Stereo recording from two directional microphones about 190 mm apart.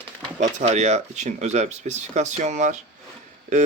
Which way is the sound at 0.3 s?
35° right (ahead or behind).